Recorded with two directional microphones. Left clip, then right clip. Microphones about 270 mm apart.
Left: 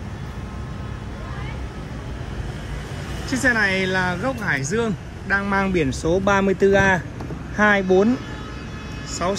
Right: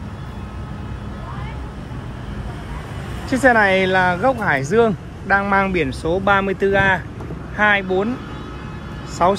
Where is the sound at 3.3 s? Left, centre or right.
Centre; by 8.1 s left.